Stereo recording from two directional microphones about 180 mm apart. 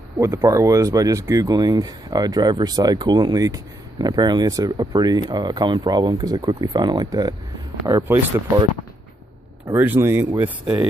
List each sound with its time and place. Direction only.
0.2 s speech: 15° right (ahead or behind)
9.8 s speech: 10° right (ahead or behind)